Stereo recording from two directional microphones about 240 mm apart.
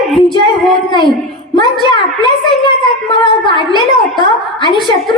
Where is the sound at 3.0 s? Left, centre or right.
Centre.